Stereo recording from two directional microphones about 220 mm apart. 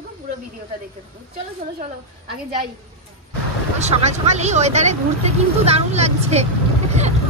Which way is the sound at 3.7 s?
30° right (ahead or behind).